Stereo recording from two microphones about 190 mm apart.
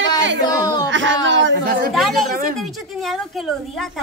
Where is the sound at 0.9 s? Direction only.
75° right (ahead or behind).